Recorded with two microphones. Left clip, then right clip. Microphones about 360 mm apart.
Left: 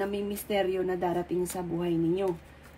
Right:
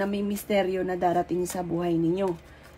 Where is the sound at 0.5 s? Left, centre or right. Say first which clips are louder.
Right 2 dB; right.